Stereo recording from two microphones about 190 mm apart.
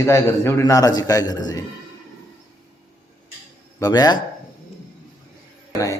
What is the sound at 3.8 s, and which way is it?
Speech, 20° left (ahead or behind).